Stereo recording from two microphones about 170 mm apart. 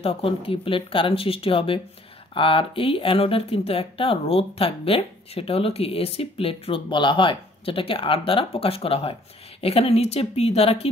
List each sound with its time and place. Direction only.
0.0 s speech: 35° left (ahead or behind)